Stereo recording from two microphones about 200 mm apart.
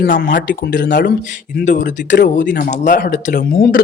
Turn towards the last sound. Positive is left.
turn(degrees=45)  # may be behind; listen again after turning